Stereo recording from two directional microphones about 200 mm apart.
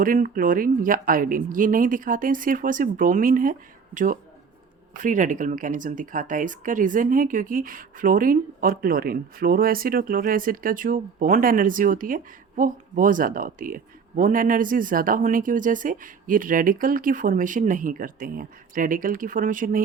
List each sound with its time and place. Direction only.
0.0 s speech: 45° right (ahead or behind)